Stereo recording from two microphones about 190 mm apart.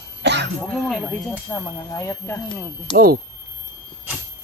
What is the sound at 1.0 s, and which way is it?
Speech, 15° left (ahead or behind).